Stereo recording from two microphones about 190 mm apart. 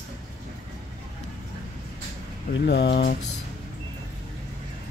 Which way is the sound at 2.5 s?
65° left (ahead or behind).